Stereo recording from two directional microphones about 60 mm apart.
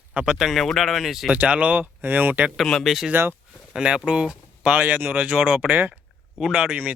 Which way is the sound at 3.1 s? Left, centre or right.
Right.